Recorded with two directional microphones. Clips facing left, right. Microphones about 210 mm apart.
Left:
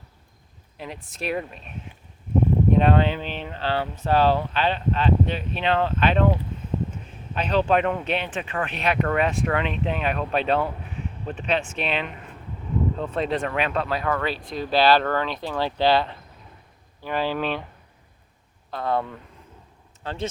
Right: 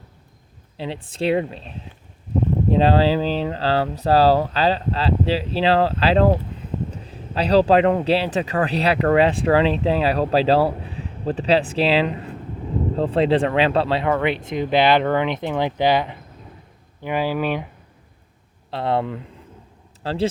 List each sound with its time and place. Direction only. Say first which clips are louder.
0.8 s speech: right 8 dB; 30° right (ahead or behind)
6.9 s a sound: right 4 dB; 35° right (ahead or behind)
7.9 s speech: right 7 dB; 35° right (ahead or behind); by 17.7 s 10° right (ahead or behind)
18.7 s speech: right 4 dB; 25° right (ahead or behind)